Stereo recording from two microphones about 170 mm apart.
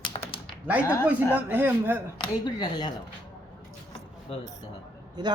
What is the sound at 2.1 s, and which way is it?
Speech, 25° left (ahead or behind).